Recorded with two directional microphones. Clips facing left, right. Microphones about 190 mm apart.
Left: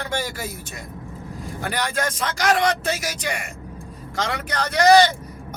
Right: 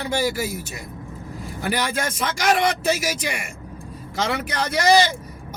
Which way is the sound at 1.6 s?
10° right (ahead or behind).